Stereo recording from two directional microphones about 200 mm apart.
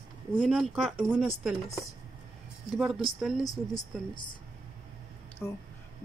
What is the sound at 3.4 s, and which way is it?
Speech, 20° left (ahead or behind).